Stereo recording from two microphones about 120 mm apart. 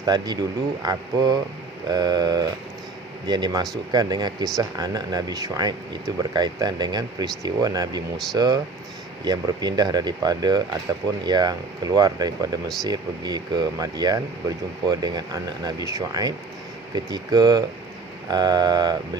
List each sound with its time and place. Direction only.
0.0 s speech: 35° right (ahead or behind)